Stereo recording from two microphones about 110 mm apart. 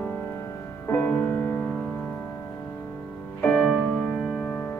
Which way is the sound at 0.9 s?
20° left (ahead or behind).